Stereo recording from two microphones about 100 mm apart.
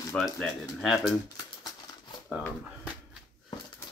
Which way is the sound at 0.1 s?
Centre (ahead or behind).